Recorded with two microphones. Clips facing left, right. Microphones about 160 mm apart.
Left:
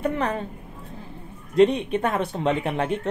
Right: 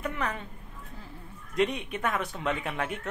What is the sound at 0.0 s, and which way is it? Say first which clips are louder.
Speech: left 8 dB; 35° left (ahead or behind).